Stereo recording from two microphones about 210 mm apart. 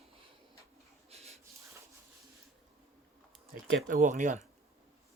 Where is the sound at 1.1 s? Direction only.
30° right (ahead or behind).